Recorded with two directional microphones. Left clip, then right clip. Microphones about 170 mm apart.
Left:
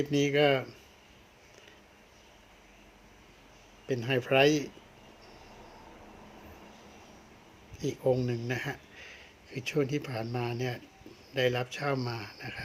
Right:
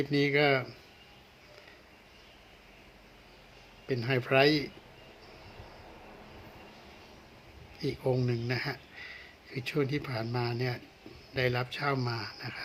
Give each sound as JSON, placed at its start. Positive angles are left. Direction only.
{"t": 0.1, "sound": "speech", "side_deg": 10}
{"t": 3.8, "sound": "speech", "side_deg": 5}
{"t": 7.8, "sound": "speech", "side_deg": 10}